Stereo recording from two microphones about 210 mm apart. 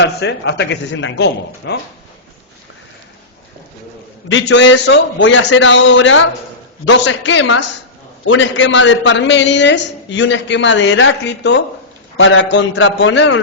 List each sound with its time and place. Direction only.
0.0 s a man's voice: 55° left (ahead or behind)
4.3 s a man's voice: 60° left (ahead or behind)